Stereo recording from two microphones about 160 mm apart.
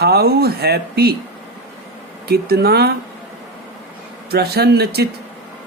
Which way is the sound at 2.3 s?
80° right.